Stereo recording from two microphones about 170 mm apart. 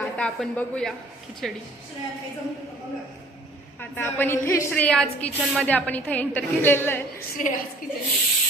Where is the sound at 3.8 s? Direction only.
10° left (ahead or behind).